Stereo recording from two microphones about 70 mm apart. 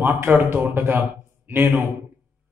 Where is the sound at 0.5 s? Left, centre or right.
Right.